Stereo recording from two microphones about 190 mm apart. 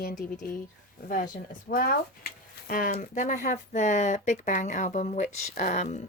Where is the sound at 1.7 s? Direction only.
50° left (ahead or behind).